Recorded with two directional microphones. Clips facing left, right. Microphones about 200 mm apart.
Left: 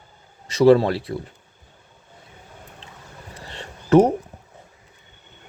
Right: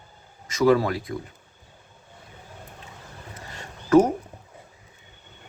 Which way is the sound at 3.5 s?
25° left (ahead or behind).